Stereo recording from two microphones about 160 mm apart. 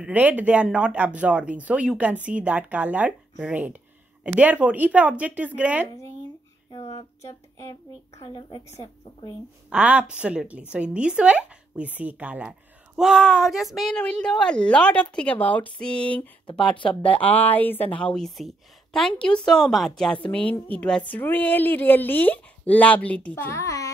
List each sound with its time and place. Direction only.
0.0 s speech: 10° right (ahead or behind)
6.7 s a sound: 35° left (ahead or behind)
7.2 s a woman's voice: 20° left (ahead or behind)
9.7 s speech: 10° right (ahead or behind); by 23.9 s 20° left (ahead or behind)